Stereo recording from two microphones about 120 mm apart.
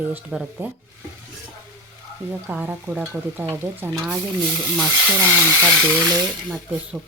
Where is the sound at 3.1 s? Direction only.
20° right (ahead or behind).